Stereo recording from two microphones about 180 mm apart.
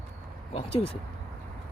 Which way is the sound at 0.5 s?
30° left (ahead or behind).